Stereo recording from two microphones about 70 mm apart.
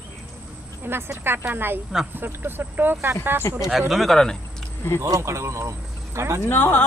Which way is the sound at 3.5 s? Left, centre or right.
Left.